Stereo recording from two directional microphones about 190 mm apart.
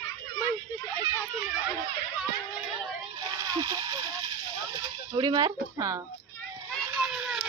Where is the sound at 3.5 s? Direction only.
20° right (ahead or behind).